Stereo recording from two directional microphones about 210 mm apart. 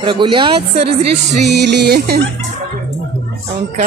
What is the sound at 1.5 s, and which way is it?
Music, 55° right (ahead or behind).